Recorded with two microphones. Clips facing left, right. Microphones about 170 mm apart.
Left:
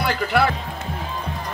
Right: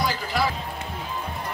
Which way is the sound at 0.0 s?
65° left (ahead or behind).